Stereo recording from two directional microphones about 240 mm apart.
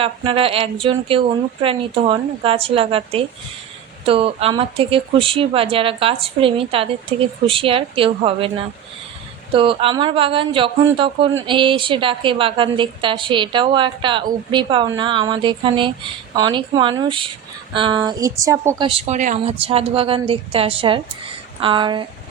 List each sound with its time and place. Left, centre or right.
0.0 s a woman's voice: right
18.9 s a woman's voice: right